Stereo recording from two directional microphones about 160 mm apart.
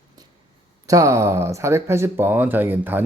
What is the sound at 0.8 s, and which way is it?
Speech, 20° right (ahead or behind).